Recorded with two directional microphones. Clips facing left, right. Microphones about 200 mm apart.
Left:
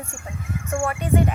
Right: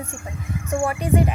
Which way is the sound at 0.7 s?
20° right (ahead or behind).